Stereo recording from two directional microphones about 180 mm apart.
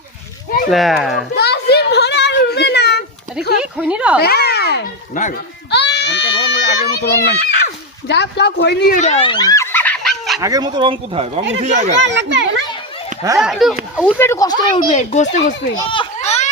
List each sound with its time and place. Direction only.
0.7 s speech: centre (ahead or behind)
1.4 s a sound: 65° left (ahead or behind)
3.6 s a woman's voice: 5° right (ahead or behind)
4.2 s a child's voice: 60° left (ahead or behind)
9.0 s fowl: 35° left (ahead or behind); by 10.4 s centre (ahead or behind)
10.4 s speech: 20° right (ahead or behind)
11.6 s speech: 40° right (ahead or behind)
11.9 s a child's voice: 80° right
13.3 s speech: centre (ahead or behind)
14.0 s speech: 15° left (ahead or behind)
14.8 s speech: 40° left (ahead or behind)
15.9 s children playing: 30° left (ahead or behind)